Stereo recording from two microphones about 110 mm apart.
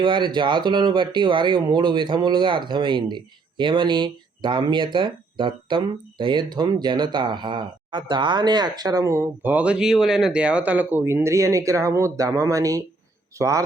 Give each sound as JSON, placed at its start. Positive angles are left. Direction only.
{"t": 0.0, "sound": "speech", "side_deg": -45}